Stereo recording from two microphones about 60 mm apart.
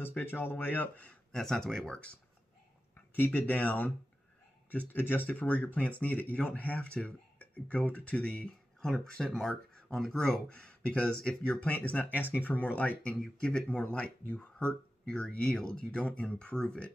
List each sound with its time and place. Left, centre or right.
0.2 s speech: left
1.3 s speech: centre
3.3 s speech: left
4.9 s speech: left; by 10.3 s centre
10.5 s speech: centre